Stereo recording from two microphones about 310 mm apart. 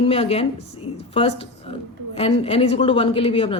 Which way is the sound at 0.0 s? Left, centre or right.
Centre.